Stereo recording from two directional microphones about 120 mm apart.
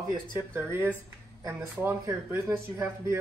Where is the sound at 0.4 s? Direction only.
20° right (ahead or behind).